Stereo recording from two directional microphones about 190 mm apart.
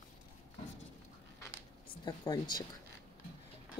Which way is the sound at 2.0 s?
20° left (ahead or behind).